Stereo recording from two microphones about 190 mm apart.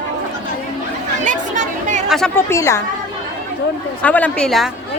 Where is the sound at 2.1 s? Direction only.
5° left (ahead or behind).